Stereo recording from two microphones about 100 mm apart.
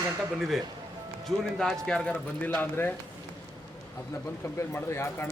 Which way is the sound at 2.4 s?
20° left (ahead or behind).